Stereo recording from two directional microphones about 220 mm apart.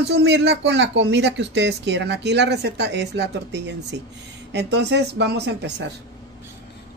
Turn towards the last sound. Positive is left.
turn(degrees=-50)  # may be behind; listen again after turning